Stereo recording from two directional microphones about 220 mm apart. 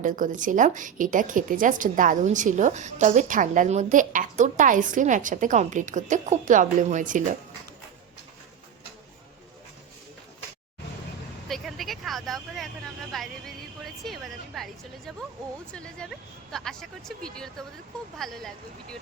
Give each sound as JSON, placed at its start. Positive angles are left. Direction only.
{"t": 0.0, "sound": "a woman's voice", "side_deg": -35}
{"t": 11.4, "sound": "vehicle", "side_deg": 0}
{"t": 13.1, "sound": "a sound", "side_deg": 0}
{"t": 15.7, "sound": "a woman's voice", "side_deg": 5}